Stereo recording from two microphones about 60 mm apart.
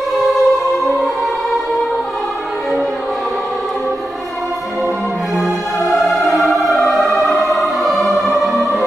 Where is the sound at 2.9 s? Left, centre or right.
Centre.